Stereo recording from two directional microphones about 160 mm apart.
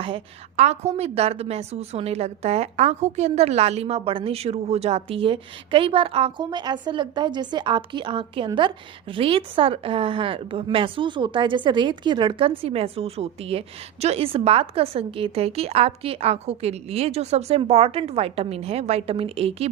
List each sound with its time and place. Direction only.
0.0 s a woman's voice: 40° right (ahead or behind)